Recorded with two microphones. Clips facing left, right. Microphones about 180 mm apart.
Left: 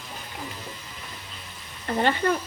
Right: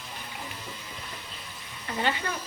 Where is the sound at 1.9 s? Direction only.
50° left (ahead or behind).